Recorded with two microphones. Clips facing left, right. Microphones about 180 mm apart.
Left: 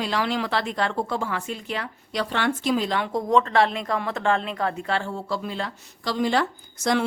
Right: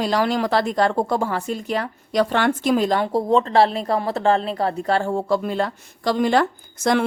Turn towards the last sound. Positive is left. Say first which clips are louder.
# right 4 dB
turn(degrees=-50)  # may be behind; listen again after turning